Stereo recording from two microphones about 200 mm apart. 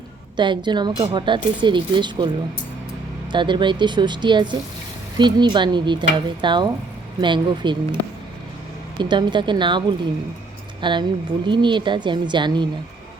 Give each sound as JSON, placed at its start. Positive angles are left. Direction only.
{"t": 0.3, "sound": "a woman's voice", "side_deg": -25}
{"t": 3.3, "sound": "a woman's voice", "side_deg": -25}
{"t": 9.0, "sound": "a woman's voice", "side_deg": -25}